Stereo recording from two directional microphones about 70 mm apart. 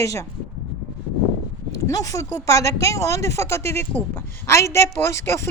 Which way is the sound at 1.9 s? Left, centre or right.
Left.